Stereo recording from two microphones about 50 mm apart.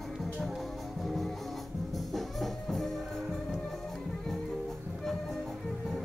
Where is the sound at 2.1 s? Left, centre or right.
Centre.